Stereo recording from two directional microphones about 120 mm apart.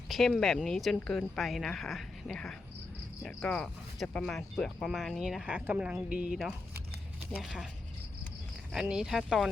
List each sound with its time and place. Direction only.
0.1 s speech: 5° left (ahead or behind)
8.7 s speech: 5° right (ahead or behind)